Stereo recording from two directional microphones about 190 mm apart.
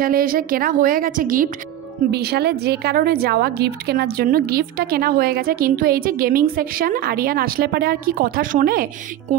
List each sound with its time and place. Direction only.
0.0 s a woman's voice: 50° right (ahead or behind)
2.0 s a woman's voice: 60° right (ahead or behind)